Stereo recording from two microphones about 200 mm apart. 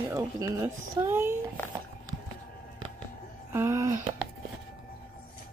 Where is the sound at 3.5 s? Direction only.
15° right (ahead or behind).